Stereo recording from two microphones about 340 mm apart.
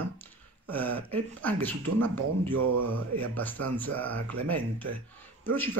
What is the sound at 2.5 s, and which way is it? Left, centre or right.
Speech, right.